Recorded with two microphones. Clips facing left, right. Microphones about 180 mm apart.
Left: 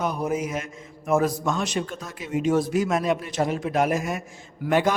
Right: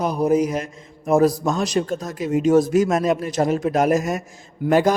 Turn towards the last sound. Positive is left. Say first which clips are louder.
# right 5 dB
turn(degrees=-40)  # may be behind; listen again after turning